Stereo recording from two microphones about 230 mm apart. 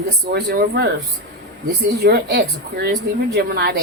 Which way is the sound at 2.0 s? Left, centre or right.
Right.